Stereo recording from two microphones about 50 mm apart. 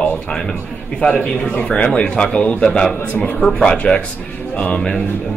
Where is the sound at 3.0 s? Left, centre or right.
Left.